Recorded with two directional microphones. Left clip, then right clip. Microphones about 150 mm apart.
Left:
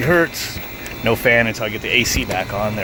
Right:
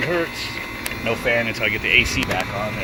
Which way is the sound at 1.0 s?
85° left.